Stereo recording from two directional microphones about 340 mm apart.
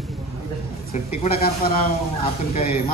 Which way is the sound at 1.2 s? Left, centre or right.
Left.